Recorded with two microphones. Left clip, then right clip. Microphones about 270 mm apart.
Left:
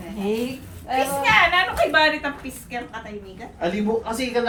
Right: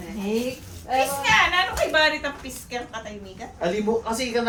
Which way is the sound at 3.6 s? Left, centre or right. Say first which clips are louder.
Even; right.